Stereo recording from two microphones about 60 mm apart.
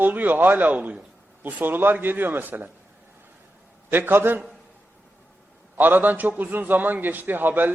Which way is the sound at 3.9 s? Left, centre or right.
Right.